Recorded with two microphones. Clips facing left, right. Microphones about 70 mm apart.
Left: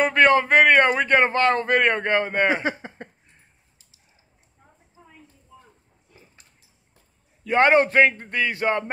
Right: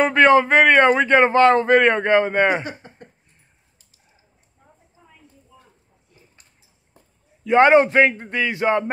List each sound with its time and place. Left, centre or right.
0.0 s speech: right
7.4 s speech: right